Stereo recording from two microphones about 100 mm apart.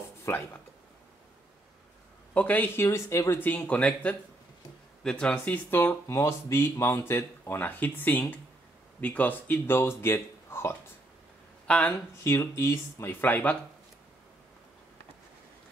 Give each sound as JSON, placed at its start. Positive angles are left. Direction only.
{"t": 0.2, "sound": "speech", "side_deg": 25}
{"t": 2.3, "sound": "speech", "side_deg": 15}
{"t": 11.6, "sound": "a sound", "side_deg": 10}
{"t": 12.2, "sound": "speech", "side_deg": 25}